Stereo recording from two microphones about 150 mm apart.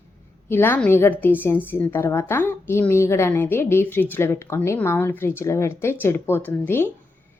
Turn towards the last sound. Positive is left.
turn(degrees=15)  # may be behind; listen again after turning